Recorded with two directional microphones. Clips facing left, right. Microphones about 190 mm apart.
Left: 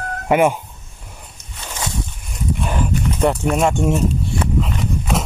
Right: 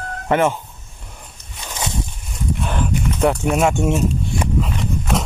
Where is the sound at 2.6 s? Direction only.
Centre (ahead or behind).